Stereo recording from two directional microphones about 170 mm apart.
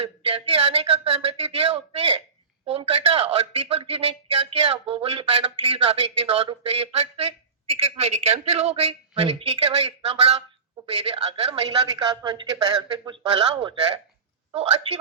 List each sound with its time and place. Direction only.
0.0 s a sound: 35° right (ahead or behind)
2.6 s speech: 35° right (ahead or behind)
12.0 s speech: 25° right (ahead or behind)